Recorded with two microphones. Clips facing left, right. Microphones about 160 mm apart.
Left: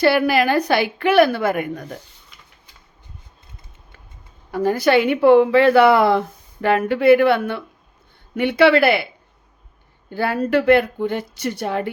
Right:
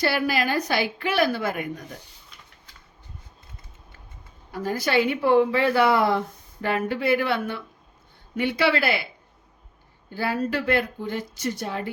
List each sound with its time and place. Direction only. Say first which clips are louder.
0.0 s a woman's voice: left 8 dB; 65° left (ahead or behind)
4.5 s a woman's voice: left 7 dB; 65° left (ahead or behind)
10.2 s a woman's voice: left 7 dB; 60° left (ahead or behind)